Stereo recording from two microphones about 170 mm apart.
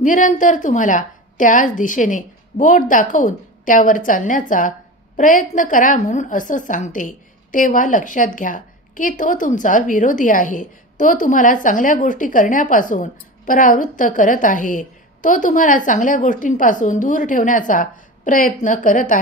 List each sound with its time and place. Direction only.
0.0 s a woman's voice: 50° left (ahead or behind)